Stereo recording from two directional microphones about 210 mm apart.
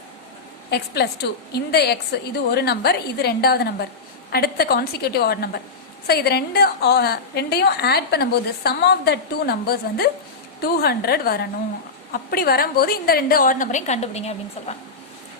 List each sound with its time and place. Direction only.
0.7 s a woman's voice: 50° left (ahead or behind); by 14.3 s 30° left (ahead or behind)